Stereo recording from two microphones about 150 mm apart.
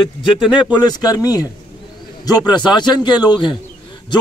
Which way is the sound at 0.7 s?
25° left (ahead or behind).